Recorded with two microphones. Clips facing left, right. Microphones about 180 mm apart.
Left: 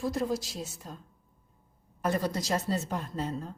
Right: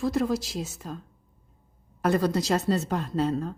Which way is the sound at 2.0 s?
85° right.